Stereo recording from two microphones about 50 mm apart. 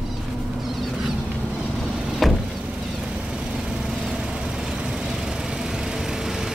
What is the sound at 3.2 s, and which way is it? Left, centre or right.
Vehicle, centre.